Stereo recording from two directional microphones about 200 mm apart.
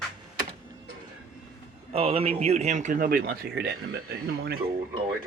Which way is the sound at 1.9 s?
30° right (ahead or behind).